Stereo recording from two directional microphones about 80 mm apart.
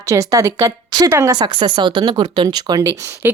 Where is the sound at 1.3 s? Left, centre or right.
Right.